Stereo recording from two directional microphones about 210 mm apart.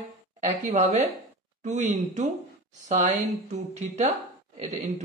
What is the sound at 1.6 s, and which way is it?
A man's voice, 35° right (ahead or behind).